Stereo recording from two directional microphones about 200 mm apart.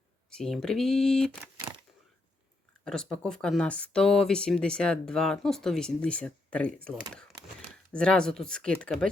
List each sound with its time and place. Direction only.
0.3 s speech: 5° left (ahead or behind)
1.7 s a sound: 20° right (ahead or behind)
2.8 s speech: 5° left (ahead or behind)